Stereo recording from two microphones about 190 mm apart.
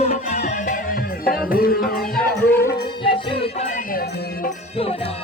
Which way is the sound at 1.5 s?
50° left (ahead or behind).